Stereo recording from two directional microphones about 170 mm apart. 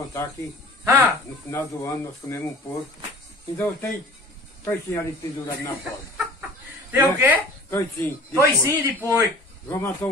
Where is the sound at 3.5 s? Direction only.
10° left (ahead or behind).